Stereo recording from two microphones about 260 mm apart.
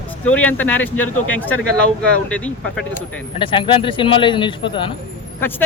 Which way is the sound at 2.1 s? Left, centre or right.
Centre.